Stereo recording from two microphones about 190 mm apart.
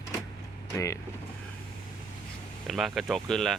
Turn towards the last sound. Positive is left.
turn(degrees=0)  # may be behind; listen again after turning